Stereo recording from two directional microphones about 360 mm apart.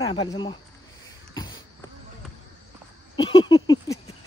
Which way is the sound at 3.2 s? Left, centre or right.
Centre.